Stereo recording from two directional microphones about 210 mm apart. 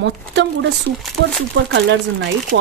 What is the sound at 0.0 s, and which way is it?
Speech, 60° right (ahead or behind).